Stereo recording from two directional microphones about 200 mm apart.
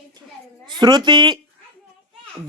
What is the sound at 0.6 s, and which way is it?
Speech, 20° right (ahead or behind).